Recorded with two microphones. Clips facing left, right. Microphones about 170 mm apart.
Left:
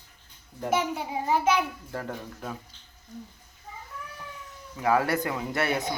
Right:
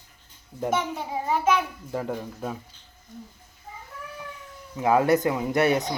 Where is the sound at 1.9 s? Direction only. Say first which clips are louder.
Right 8 dB; 15° right (ahead or behind).